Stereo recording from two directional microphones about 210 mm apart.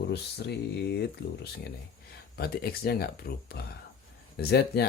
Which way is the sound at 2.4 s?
50° left (ahead or behind).